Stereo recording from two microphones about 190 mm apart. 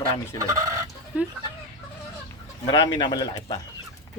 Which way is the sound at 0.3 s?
15° right (ahead or behind).